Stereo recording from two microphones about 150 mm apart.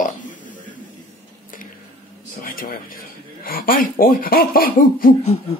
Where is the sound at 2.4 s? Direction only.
70° left (ahead or behind).